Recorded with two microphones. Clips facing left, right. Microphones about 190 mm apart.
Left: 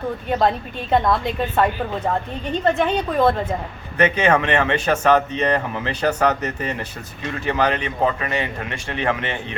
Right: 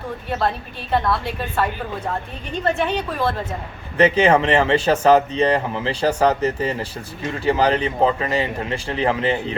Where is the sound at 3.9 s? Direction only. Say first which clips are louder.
Right 3 dB; 30° right (ahead or behind).